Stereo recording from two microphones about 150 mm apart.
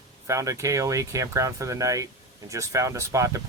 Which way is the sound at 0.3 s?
20° right (ahead or behind).